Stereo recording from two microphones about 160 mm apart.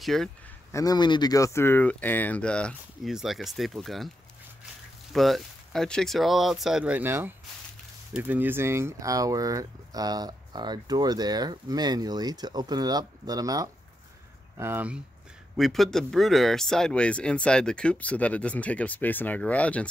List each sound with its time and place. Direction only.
0.0 s speech: centre (ahead or behind)
0.7 s speech: 20° left (ahead or behind); by 4.1 s centre (ahead or behind)
5.1 s speech: centre (ahead or behind)
15.5 s speech: centre (ahead or behind)